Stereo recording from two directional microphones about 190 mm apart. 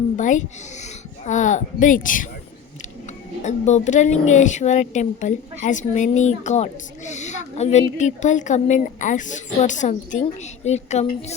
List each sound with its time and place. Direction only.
0.2 s a woman's voice: 40° left (ahead or behind)
3.4 s a woman's voice: 40° left (ahead or behind)